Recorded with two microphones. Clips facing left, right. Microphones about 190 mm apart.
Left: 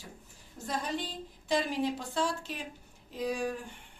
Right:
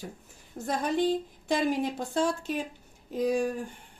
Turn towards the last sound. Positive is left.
turn(degrees=-45)  # may be behind; listen again after turning